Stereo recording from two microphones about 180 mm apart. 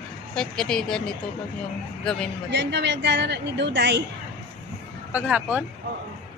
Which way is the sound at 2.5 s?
75° right (ahead or behind).